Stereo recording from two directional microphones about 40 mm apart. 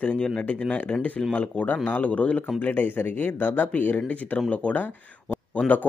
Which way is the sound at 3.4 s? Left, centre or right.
Left.